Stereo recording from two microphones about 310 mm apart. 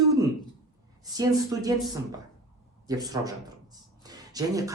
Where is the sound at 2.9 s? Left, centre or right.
Centre.